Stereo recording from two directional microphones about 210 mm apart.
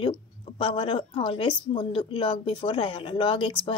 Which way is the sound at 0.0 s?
25° left (ahead or behind).